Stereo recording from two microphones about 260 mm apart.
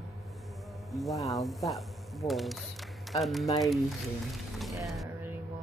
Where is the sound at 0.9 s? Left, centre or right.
Centre.